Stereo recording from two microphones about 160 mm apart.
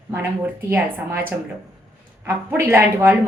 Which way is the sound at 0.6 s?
15° right (ahead or behind).